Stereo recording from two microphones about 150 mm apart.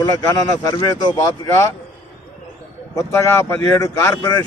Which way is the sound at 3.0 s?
20° left (ahead or behind).